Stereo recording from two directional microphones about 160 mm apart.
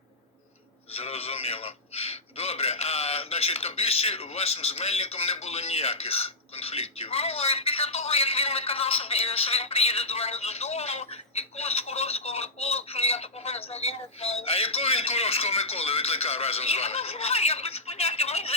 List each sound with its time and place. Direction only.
0.9 s a man's voice: 40° left (ahead or behind)